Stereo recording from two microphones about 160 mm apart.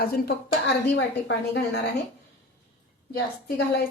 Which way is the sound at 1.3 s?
90° left.